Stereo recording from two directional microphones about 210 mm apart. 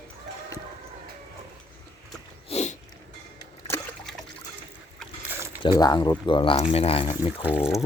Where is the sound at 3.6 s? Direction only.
10° left (ahead or behind).